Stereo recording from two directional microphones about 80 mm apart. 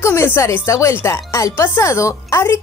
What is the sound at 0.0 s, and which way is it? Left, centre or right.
Speech, left.